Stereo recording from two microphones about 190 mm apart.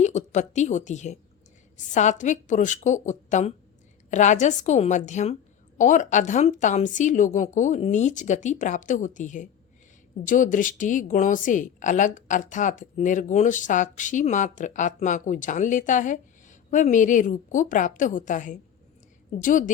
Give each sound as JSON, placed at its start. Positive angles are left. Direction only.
{"t": 0.0, "sound": "a woman's voice", "side_deg": 35}